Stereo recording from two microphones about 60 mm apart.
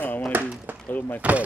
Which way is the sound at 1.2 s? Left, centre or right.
Right.